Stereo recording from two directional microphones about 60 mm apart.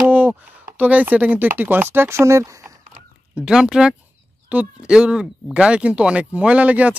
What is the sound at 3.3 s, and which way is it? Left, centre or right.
Speech, centre.